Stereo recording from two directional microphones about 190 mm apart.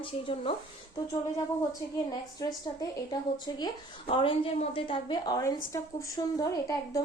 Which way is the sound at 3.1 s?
20° left (ahead or behind).